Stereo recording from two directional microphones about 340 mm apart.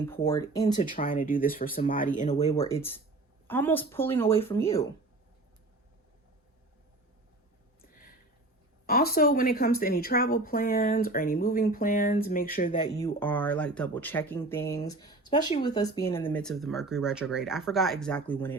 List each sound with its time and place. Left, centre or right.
0.0 s speech: centre
0.9 s speech: left
3.4 s speech: centre
8.9 s speech: left
13.0 s speech: centre